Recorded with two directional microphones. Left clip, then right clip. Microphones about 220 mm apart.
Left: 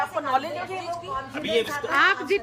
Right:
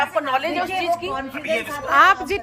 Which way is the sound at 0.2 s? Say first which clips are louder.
Right 4 dB; 45° right (ahead or behind).